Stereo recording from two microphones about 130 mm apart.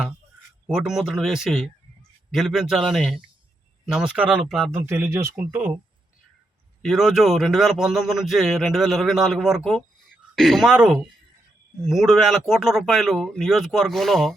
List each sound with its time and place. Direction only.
0.7 s a man's voice: 5° right (ahead or behind)
4.7 s speech: 20° right (ahead or behind)
6.8 s a man's voice: centre (ahead or behind)